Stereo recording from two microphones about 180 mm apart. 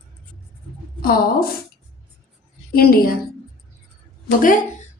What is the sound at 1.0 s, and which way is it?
Speech, 55° left (ahead or behind).